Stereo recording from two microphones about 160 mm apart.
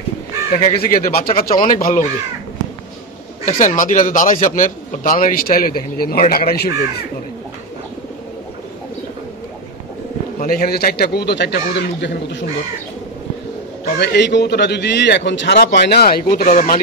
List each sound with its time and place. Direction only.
0.5 s a man's voice: 65° left (ahead or behind)
3.4 s a man's voice: 50° left (ahead or behind); by 6.7 s 75° left (ahead or behind)
10.4 s speech: 75° left (ahead or behind); by 12.4 s 90° left
13.9 s a man's voice: 90° left; by 16.7 s 55° left (ahead or behind)